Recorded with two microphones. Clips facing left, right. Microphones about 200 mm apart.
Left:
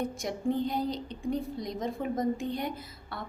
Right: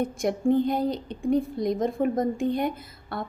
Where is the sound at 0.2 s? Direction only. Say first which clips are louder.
Right 10 dB; 55° right (ahead or behind).